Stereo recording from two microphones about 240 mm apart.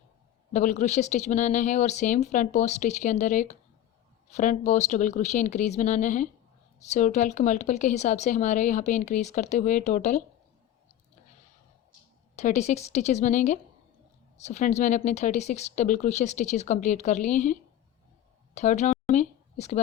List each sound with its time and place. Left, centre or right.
0.5 s a woman's voice: left
12.4 s a woman's voice: left
19.1 s a sound: left